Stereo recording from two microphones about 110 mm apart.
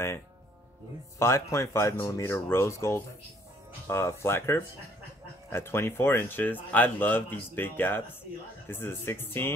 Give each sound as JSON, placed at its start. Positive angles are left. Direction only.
{"t": 1.2, "sound": "speech", "side_deg": 25}